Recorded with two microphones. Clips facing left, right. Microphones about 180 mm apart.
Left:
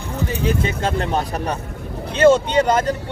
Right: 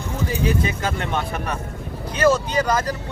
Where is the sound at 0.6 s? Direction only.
30° left (ahead or behind).